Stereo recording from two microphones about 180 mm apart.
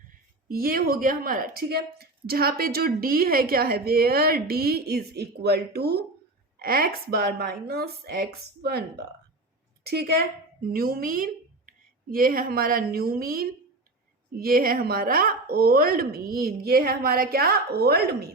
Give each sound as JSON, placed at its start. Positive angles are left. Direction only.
{"t": 0.4, "sound": "a woman's voice", "side_deg": -55}